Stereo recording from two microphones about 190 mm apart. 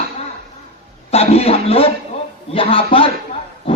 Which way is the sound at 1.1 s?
30° left (ahead or behind).